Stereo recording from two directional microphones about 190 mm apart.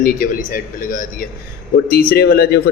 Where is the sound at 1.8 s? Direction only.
50° left (ahead or behind).